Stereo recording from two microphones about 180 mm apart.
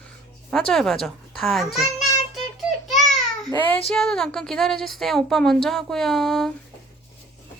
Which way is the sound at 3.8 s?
Centre (ahead or behind).